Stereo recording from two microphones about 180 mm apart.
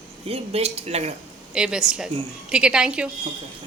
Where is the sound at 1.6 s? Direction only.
5° right (ahead or behind).